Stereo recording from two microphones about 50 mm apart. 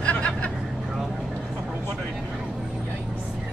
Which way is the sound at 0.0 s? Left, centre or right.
Left.